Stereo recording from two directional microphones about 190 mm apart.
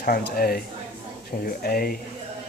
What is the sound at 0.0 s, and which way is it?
Speech, 50° left (ahead or behind).